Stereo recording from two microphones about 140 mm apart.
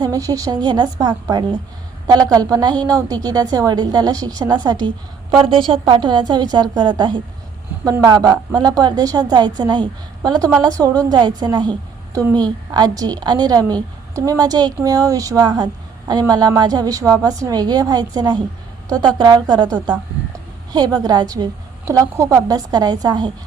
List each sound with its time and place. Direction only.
0.0 s a woman's voice: 25° right (ahead or behind)
20.7 s a woman's voice: 30° right (ahead or behind)